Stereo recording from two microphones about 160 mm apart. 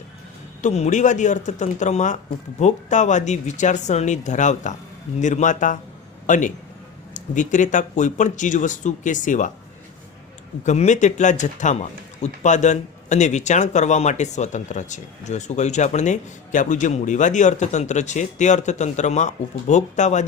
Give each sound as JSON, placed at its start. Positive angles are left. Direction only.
{"t": 0.6, "sound": "a man's voice", "side_deg": 45}
{"t": 10.7, "sound": "a man's voice", "side_deg": 45}